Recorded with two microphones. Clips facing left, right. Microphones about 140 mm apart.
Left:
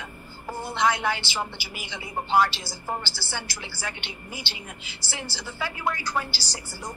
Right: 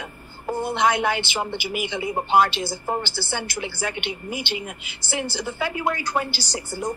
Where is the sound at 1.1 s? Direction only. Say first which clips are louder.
Right 4 dB; 20° right (ahead or behind).